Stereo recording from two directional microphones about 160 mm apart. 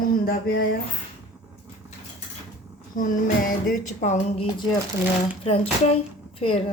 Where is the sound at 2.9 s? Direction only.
60° left (ahead or behind).